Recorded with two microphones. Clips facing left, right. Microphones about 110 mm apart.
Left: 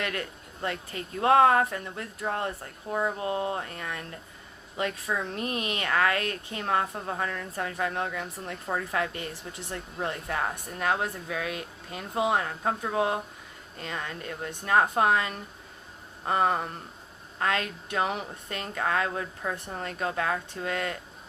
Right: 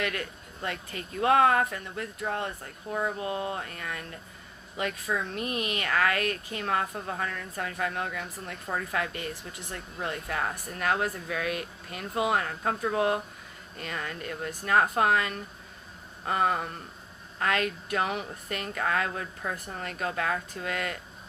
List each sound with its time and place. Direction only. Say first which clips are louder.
0.0 s speech: even; 30° left (ahead or behind)
2.9 s speech: left 2 dB; 15° left (ahead or behind)
3.2 s speech: left 2 dB; 30° left (ahead or behind)